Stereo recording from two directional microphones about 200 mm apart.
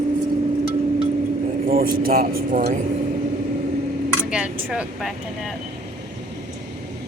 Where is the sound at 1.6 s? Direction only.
45° right (ahead or behind).